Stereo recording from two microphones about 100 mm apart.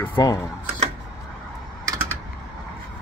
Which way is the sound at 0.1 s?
45° left (ahead or behind).